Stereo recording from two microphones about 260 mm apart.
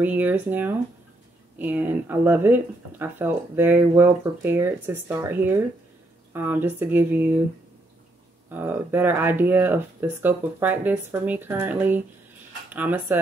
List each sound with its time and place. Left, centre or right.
0.0 s speech: centre
8.5 s speech: centre